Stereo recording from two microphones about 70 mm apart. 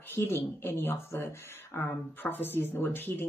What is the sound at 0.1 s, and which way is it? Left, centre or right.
Speech, left.